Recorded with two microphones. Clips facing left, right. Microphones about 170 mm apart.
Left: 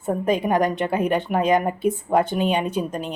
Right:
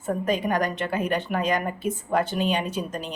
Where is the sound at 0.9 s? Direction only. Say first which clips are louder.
Left 3 dB; 60° left (ahead or behind).